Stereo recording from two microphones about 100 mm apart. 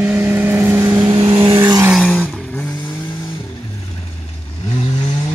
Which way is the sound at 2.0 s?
15° left (ahead or behind).